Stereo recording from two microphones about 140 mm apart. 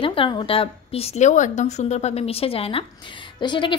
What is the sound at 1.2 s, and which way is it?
A woman's voice, 60° left (ahead or behind).